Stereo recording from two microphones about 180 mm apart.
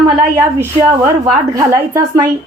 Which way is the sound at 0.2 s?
15° right (ahead or behind).